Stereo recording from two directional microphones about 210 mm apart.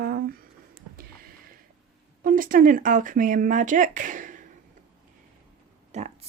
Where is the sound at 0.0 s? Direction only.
45° right (ahead or behind).